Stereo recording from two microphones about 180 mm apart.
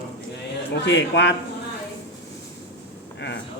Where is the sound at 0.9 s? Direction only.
80° left.